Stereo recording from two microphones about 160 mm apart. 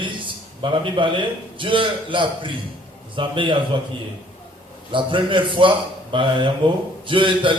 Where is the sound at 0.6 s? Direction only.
30° right (ahead or behind).